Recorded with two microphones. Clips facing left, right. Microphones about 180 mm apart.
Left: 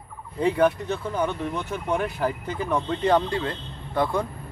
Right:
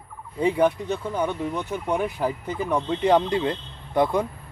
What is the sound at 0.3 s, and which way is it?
Speech, 10° right (ahead or behind).